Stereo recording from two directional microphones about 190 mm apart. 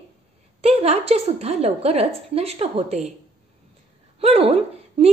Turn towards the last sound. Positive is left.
turn(degrees=-35)  # may be behind; listen again after turning